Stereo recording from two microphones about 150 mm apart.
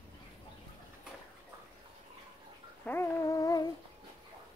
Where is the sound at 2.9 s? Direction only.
15° left (ahead or behind).